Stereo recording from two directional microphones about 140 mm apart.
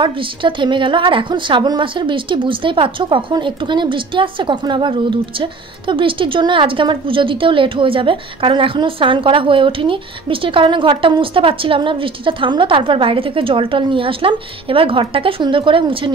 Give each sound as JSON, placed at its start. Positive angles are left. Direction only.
{"t": 0.0, "sound": "a woman's voice", "side_deg": -35}